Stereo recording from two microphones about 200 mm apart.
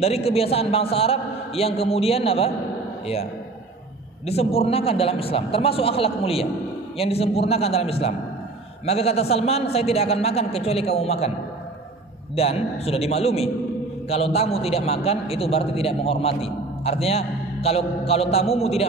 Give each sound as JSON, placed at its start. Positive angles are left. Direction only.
{"t": 0.0, "sound": "a man's voice", "side_deg": 30}
{"t": 4.3, "sound": "a man's voice", "side_deg": 30}
{"t": 12.4, "sound": "a man's voice", "side_deg": 30}